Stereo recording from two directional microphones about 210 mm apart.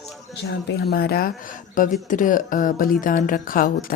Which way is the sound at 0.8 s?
50° left (ahead or behind).